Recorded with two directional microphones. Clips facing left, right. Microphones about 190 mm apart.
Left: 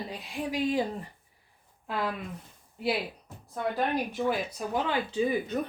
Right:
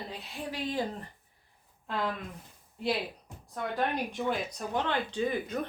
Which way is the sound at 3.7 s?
5° left (ahead or behind).